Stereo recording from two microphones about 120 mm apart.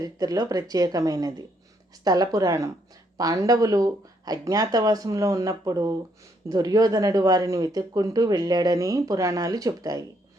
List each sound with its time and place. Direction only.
0.0 s speech: 30° right (ahead or behind)